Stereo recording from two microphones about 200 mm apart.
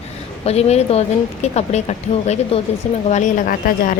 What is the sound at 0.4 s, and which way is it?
A woman's voice, 30° left (ahead or behind).